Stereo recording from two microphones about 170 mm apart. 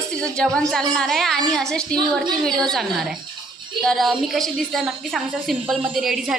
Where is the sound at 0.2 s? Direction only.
5° left (ahead or behind).